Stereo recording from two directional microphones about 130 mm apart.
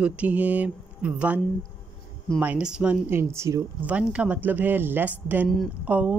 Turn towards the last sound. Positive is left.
turn(degrees=-10)  # may be behind; listen again after turning